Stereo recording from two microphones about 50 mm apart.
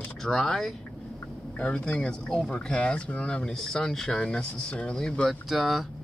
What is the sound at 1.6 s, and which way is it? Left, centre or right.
Speech, left.